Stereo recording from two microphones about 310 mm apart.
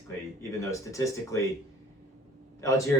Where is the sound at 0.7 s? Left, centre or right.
Centre.